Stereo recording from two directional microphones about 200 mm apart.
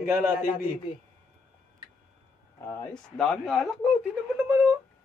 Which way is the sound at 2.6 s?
10° left (ahead or behind).